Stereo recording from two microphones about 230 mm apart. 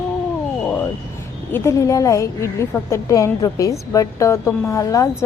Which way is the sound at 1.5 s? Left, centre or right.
Centre.